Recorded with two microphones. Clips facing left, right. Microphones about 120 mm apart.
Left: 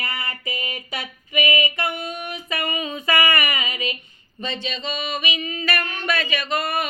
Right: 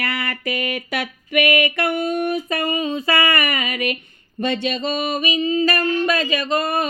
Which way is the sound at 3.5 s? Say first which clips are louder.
Right 4 dB; 55° right (ahead or behind).